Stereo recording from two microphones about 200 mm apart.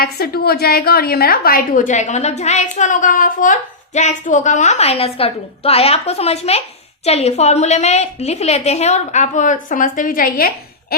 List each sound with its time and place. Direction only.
0.0 s a woman's voice: 50° left (ahead or behind)